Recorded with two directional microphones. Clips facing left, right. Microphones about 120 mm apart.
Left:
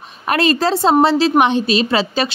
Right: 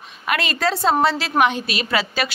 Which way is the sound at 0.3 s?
35° left (ahead or behind).